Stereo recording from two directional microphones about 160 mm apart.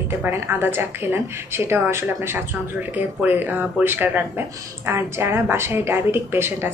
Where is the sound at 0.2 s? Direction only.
15° right (ahead or behind).